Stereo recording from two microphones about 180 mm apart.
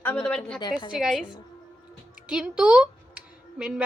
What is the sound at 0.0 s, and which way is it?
A woman's voice, 5° left (ahead or behind).